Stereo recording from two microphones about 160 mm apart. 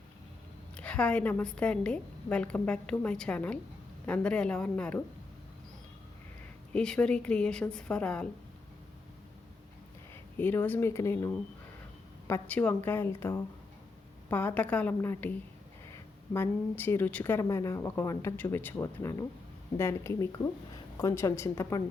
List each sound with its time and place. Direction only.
0.8 s a woman's voice: 10° left (ahead or behind)
6.7 s a woman's voice: 5° left (ahead or behind)
10.3 s a woman's voice: 10° left (ahead or behind)
16.3 s a woman's voice: 15° left (ahead or behind)